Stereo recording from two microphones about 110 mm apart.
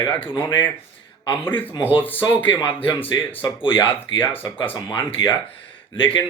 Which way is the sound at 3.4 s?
45° left (ahead or behind).